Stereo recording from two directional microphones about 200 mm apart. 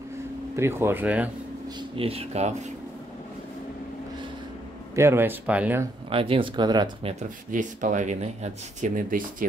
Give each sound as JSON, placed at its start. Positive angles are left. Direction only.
{"t": 0.6, "sound": "speech", "side_deg": -10}
{"t": 1.8, "sound": "speech", "side_deg": -30}
{"t": 4.9, "sound": "speech", "side_deg": -10}
{"t": 6.0, "sound": "speech", "side_deg": -25}